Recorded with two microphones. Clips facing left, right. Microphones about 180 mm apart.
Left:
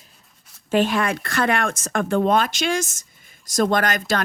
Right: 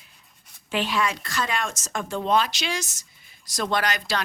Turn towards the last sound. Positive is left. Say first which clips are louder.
# left 5 dB
turn(degrees=50)  # may be behind; listen again after turning